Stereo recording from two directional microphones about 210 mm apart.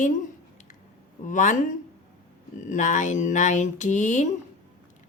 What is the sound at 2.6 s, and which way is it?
Speech, 35° left (ahead or behind).